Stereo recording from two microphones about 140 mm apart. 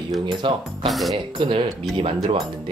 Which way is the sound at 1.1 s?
35° right (ahead or behind).